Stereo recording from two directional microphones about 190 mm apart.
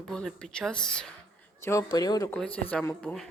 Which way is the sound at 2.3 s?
5° left (ahead or behind).